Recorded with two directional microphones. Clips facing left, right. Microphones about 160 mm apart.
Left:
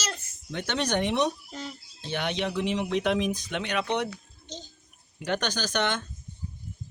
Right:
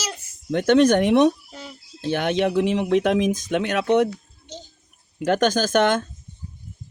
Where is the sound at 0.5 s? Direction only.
50° right (ahead or behind).